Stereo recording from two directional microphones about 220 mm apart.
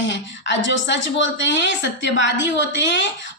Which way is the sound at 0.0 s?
55° left (ahead or behind).